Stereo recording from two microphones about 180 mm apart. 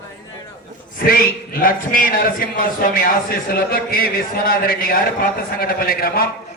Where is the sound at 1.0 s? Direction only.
55° left (ahead or behind).